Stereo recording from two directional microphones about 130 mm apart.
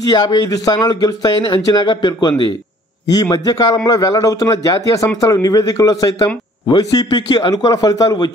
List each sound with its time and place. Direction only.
0.1 s a man's voice: 30° left (ahead or behind)